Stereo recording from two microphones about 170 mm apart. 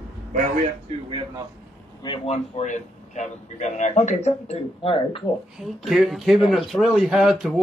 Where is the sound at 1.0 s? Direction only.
30° right (ahead or behind).